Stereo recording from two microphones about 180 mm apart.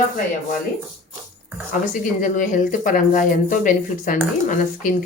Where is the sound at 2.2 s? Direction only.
45° left (ahead or behind).